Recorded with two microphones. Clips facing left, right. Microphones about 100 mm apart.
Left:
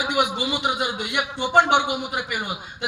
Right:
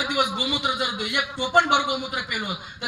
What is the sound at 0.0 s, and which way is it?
Speech, 25° left (ahead or behind).